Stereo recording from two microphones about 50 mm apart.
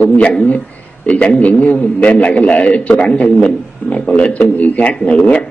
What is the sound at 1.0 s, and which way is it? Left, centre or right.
A man's voice, left.